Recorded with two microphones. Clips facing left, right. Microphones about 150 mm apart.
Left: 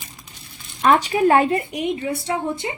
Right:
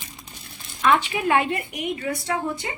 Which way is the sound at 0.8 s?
40° left (ahead or behind).